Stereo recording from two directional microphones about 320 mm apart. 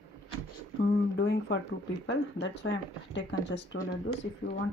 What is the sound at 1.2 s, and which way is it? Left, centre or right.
Speech, left.